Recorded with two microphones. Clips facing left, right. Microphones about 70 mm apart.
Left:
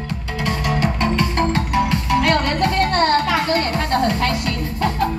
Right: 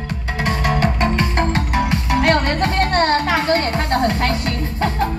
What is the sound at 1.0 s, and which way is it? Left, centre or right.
Music, right.